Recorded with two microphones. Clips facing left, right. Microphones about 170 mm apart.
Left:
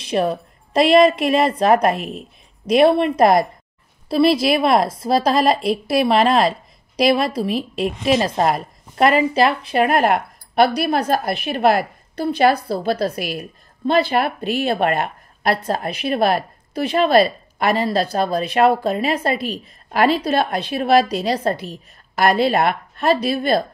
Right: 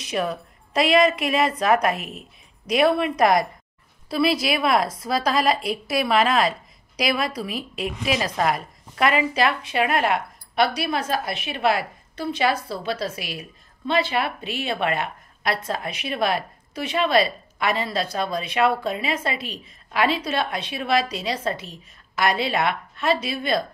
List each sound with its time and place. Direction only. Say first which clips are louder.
0.0 s a woman's voice: left 6 dB; 30° left (ahead or behind)
15.6 s a woman's voice: left 6 dB; 35° left (ahead or behind)